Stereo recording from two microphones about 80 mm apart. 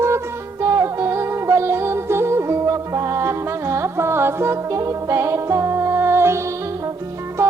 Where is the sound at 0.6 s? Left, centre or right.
Right.